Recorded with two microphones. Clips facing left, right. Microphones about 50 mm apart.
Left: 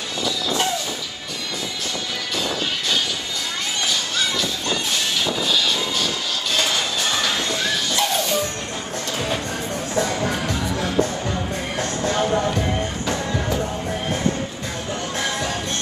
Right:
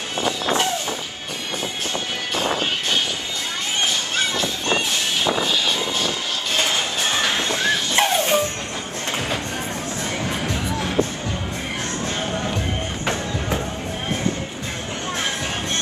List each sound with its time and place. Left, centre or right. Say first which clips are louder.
0.2 s vehicle: right 2 dB; right
2.3 s music: right 3 dB; right
3.8 s vehicle: right 1 dB; right
9.9 s music: left 6 dB; left